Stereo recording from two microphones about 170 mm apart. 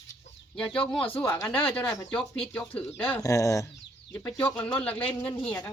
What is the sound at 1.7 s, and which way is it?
Speech, 5° left (ahead or behind).